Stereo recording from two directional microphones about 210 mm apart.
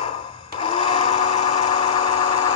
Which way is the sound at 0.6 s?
25° left (ahead or behind).